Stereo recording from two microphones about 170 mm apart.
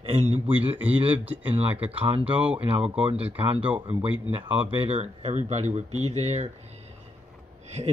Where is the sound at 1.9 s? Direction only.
35° right (ahead or behind).